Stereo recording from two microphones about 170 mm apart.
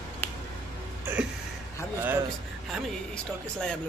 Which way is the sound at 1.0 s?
10° right (ahead or behind).